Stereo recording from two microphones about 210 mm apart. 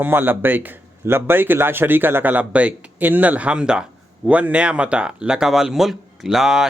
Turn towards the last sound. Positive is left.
turn(degrees=0)  # may be behind; listen again after turning